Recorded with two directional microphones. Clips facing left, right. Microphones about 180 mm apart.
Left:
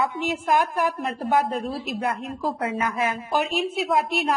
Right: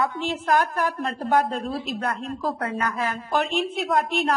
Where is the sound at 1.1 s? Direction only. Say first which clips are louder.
Even; centre (ahead or behind).